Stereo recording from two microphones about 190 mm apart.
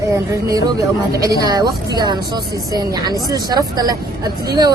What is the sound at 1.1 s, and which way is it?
A woman's voice, 20° right (ahead or behind).